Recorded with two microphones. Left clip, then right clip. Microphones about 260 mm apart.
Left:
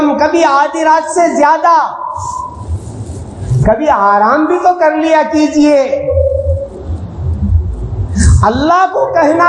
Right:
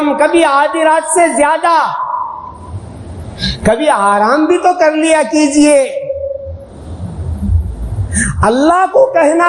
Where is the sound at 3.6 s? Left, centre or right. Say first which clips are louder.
Left 1 dB; right.